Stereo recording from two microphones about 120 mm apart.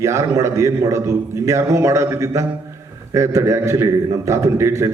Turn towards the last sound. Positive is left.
turn(degrees=-25)  # may be behind; listen again after turning